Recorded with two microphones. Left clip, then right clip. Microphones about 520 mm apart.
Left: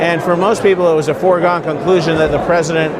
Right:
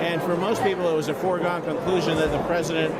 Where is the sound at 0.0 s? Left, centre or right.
Left.